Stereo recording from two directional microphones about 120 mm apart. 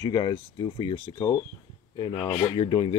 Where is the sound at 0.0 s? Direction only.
40° left (ahead or behind).